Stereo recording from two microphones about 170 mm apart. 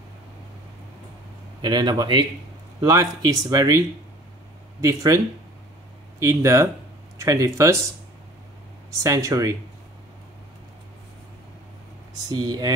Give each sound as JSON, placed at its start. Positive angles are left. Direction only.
{"t": 1.6, "sound": "speech", "side_deg": -25}
{"t": 4.8, "sound": "speech", "side_deg": -20}
{"t": 9.0, "sound": "speech", "side_deg": -20}
{"t": 12.1, "sound": "speech", "side_deg": -20}